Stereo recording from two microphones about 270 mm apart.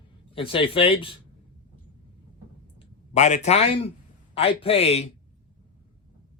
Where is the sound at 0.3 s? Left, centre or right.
Centre.